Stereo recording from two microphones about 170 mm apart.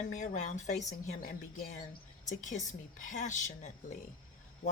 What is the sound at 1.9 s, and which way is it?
Speech, 45° left (ahead or behind).